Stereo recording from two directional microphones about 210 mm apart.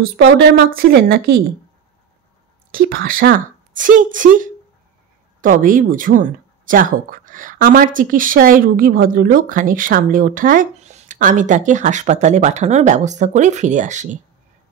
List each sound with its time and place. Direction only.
0.2 s a woman's voice: 60° right (ahead or behind)
0.7 s speech: 45° right (ahead or behind)
2.7 s speech: 45° right (ahead or behind)